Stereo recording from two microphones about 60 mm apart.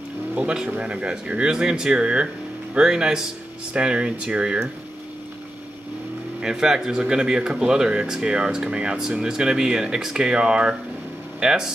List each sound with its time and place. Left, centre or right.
0.3 s speech: right
6.4 s speech: centre